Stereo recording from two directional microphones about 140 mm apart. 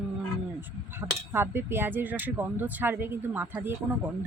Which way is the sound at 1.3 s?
15° right (ahead or behind).